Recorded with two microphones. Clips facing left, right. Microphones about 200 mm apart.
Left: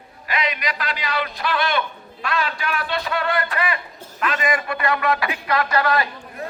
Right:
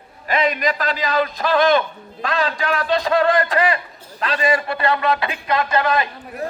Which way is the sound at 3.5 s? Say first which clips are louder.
Right 6 dB; 35° right (ahead or behind).